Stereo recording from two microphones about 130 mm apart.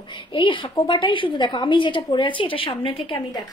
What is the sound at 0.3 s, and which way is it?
A woman's voice, 40° left (ahead or behind).